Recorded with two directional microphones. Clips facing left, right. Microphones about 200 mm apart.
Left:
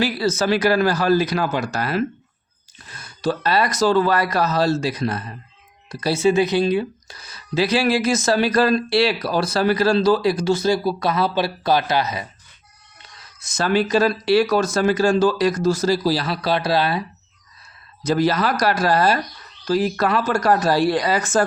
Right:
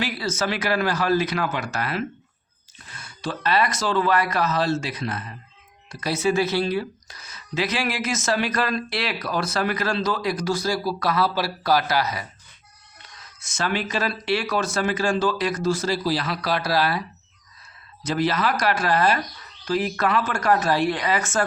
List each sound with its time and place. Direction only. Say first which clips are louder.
0.0 s speech: left 6 dB; 35° left (ahead or behind); by 6.8 s 20° left (ahead or behind)
7.1 s speech: left 6 dB; 30° left (ahead or behind)
13.4 s speech: left 7 dB; 35° left (ahead or behind)
18.0 s speech: left 4 dB; 40° left (ahead or behind)